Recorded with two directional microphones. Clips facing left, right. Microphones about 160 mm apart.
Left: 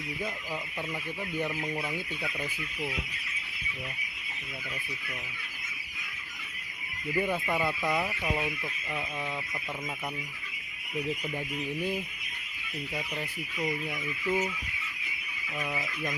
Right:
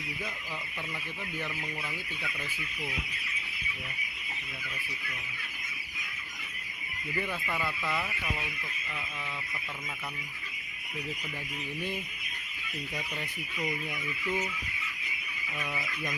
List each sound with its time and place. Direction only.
7.2 s speech: 15° left (ahead or behind)
14.3 s speech: 10° left (ahead or behind)